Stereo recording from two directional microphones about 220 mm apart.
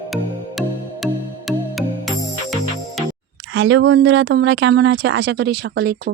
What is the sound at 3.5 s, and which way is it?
Speech, 55° right (ahead or behind).